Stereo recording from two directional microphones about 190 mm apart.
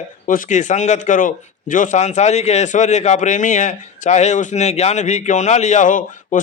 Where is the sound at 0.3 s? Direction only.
45° left (ahead or behind).